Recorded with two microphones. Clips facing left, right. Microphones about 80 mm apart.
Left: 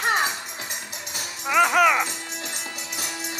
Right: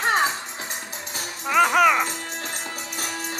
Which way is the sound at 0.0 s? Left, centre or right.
Right.